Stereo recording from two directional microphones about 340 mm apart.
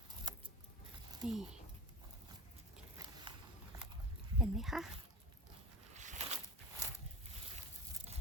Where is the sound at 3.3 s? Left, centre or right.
Centre.